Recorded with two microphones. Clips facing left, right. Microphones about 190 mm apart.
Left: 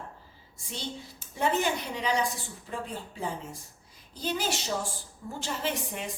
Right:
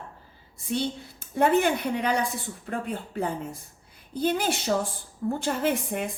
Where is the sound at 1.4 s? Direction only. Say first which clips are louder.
Right 6 dB; 55° right (ahead or behind).